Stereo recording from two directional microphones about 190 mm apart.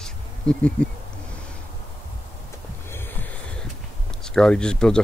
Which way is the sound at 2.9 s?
10° left (ahead or behind).